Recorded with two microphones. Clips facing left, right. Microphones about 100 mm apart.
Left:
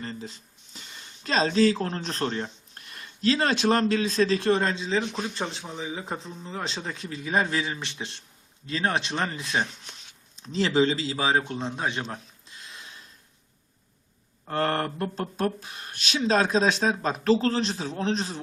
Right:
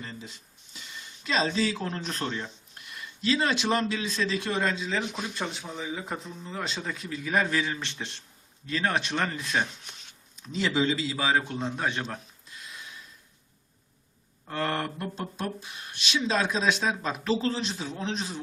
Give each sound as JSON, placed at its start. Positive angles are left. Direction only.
{"t": 0.8, "sound": "speech", "side_deg": 45}
{"t": 4.9, "sound": "speech", "side_deg": -5}
{"t": 5.3, "sound": "speech", "side_deg": 30}
{"t": 5.5, "sound": "speech", "side_deg": 0}
{"t": 5.8, "sound": "a man's voice", "side_deg": 25}
{"t": 9.6, "sound": "shuffling cards", "side_deg": 0}
{"t": 10.3, "sound": "speech", "side_deg": 30}
{"t": 11.5, "sound": "a man's voice", "side_deg": 15}
{"t": 14.4, "sound": "speech", "side_deg": 40}